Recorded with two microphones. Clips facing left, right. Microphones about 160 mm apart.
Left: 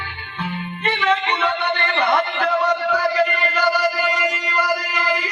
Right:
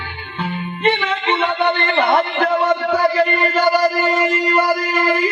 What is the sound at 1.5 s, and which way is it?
Music, 50° right (ahead or behind).